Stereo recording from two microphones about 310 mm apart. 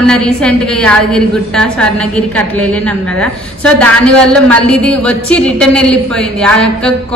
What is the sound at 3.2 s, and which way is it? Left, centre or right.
A woman's voice, centre.